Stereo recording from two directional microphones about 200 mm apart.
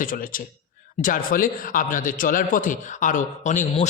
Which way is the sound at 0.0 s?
45° left (ahead or behind).